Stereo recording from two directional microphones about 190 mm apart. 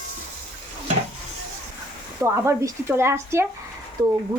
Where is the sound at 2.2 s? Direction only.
15° right (ahead or behind).